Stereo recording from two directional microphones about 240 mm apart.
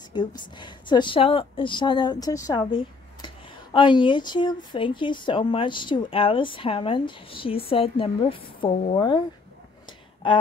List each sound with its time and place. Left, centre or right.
0.1 s a woman's voice: centre